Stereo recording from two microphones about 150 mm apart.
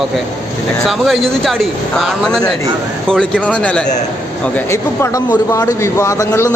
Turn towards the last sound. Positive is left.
turn(degrees=20)  # may be behind; listen again after turning